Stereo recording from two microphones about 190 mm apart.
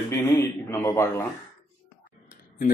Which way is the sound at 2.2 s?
50° left (ahead or behind).